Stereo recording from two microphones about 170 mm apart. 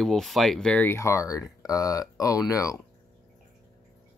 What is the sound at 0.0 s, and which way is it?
Speech, centre (ahead or behind).